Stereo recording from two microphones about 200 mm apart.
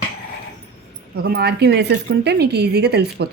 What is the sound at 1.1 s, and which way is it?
A woman's voice, 50° right (ahead or behind).